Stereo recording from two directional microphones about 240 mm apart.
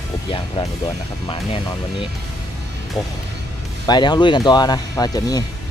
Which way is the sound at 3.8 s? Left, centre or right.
Centre.